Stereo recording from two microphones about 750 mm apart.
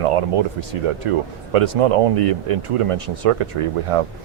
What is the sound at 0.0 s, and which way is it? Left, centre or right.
Speech, right.